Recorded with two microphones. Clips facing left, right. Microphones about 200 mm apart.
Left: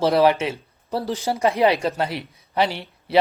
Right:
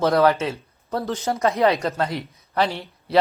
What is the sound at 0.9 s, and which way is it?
Speech, 10° left (ahead or behind).